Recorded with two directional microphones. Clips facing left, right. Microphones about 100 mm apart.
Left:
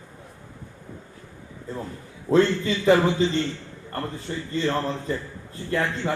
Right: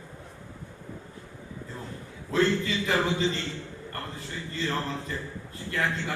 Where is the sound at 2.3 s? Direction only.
30° left (ahead or behind).